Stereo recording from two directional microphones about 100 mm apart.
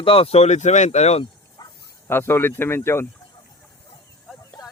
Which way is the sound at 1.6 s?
40° left (ahead or behind).